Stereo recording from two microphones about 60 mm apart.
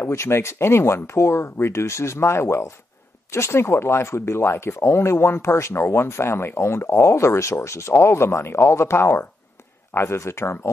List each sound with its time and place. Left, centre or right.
0.0 s speech: left